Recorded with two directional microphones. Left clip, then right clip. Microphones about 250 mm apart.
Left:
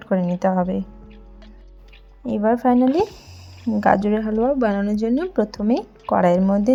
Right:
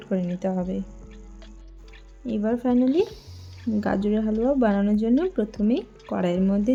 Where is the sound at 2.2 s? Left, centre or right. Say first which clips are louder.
Left 7 dB; left.